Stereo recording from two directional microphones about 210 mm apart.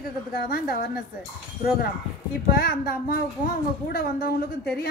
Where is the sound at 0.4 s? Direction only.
45° left (ahead or behind).